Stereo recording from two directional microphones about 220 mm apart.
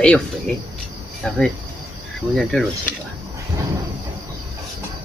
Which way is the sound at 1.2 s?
5° left (ahead or behind).